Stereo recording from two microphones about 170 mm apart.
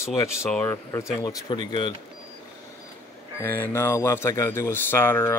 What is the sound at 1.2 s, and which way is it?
Speech, 25° left (ahead or behind).